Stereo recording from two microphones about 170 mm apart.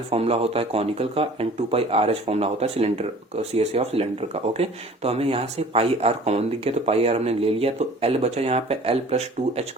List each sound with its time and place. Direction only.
0.1 s speech: 35° right (ahead or behind)